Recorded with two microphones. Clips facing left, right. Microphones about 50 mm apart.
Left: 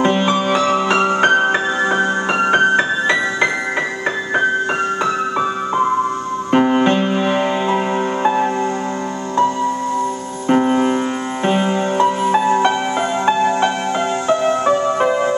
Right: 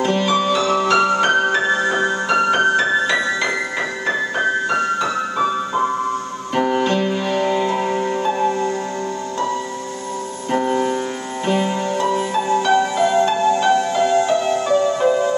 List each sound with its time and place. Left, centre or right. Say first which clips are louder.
0.0 s music: left 2 dB; left
6.5 s music: left 4 dB; left
10.5 s music: left 4 dB; left